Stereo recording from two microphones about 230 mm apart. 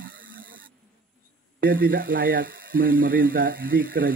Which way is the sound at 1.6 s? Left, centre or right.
Right.